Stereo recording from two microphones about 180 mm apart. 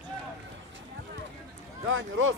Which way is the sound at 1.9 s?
90° right.